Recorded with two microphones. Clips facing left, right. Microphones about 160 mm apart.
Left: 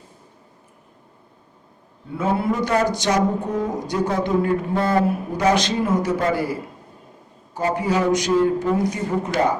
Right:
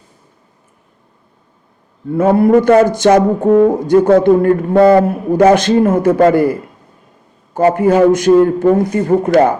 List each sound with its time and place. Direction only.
2.0 s a man's voice: 50° right (ahead or behind)